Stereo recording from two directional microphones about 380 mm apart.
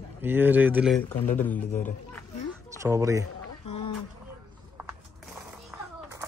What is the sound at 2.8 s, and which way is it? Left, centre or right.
Speech, centre.